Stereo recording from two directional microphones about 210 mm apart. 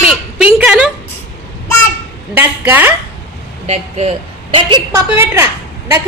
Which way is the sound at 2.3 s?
10° right (ahead or behind).